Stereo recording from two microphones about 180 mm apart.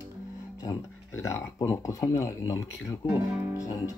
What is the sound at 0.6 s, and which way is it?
Speech, 15° left (ahead or behind).